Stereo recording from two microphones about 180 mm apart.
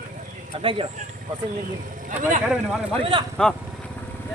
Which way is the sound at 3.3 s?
5° left (ahead or behind).